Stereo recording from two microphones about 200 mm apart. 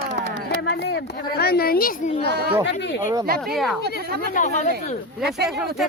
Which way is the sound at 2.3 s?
55° right (ahead or behind).